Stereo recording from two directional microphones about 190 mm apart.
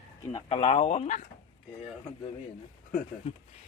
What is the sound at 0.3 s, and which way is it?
Speech, 30° left (ahead or behind).